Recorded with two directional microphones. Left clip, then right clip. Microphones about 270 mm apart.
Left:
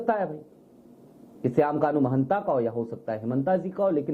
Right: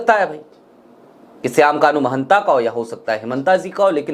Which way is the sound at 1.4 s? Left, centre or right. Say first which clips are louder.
Right 10 dB; centre.